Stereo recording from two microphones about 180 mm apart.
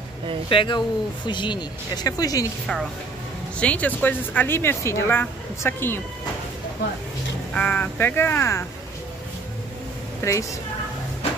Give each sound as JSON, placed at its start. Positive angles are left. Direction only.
{"t": 0.5, "sound": "speech", "side_deg": 25}
{"t": 3.5, "sound": "speech", "side_deg": 5}
{"t": 7.5, "sound": "speech", "side_deg": 10}
{"t": 10.2, "sound": "speech", "side_deg": 15}